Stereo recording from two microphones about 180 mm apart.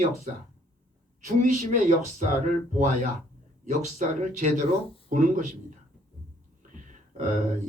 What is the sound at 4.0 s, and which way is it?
Speech, 40° right (ahead or behind).